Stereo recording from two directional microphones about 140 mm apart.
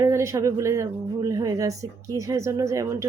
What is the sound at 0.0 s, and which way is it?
Speech, 20° right (ahead or behind).